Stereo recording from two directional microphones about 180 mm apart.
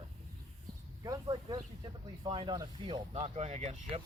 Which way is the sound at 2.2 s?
25° right (ahead or behind).